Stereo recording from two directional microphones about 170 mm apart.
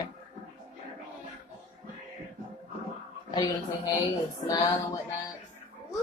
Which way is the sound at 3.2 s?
25° left (ahead or behind).